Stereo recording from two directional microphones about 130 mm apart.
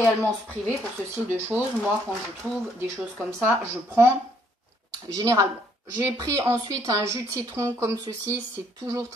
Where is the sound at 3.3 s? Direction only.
20° right (ahead or behind).